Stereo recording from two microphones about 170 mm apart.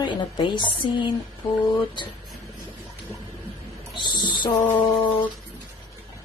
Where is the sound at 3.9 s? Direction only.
25° left (ahead or behind).